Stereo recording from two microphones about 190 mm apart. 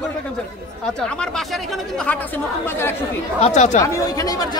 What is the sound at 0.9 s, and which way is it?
Speech, 5° left (ahead or behind).